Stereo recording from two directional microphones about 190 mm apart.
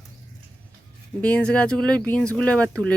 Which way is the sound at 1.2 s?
5° left (ahead or behind).